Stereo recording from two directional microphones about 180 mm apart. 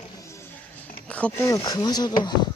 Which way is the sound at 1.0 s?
5° left (ahead or behind).